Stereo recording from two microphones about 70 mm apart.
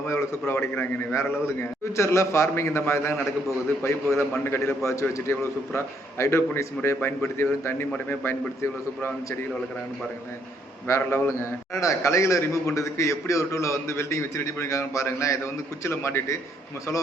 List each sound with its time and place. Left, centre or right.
0.1 s a man's voice: left
10.8 s a man's voice: left